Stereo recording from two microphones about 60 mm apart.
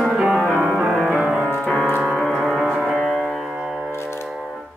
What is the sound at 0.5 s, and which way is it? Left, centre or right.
Music, right.